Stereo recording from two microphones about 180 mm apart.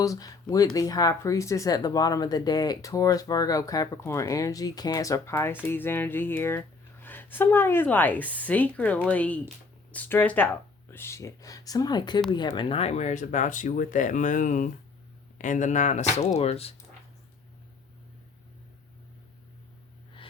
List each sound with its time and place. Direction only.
0.0 s speech: 20° left (ahead or behind); by 16.7 s 35° left (ahead or behind)